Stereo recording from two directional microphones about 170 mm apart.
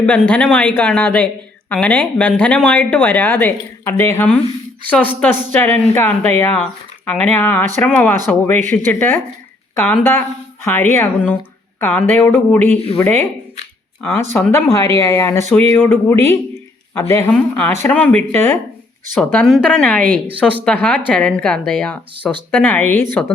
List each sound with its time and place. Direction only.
0.0 s a woman's voice: 10° left (ahead or behind)